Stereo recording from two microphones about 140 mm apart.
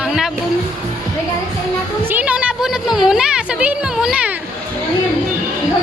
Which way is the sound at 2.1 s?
10° right (ahead or behind).